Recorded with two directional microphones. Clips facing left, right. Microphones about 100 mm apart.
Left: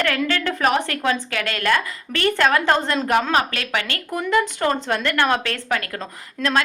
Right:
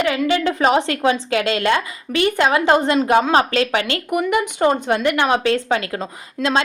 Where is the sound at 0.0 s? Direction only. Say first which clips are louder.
Right 4 dB; 15° right (ahead or behind).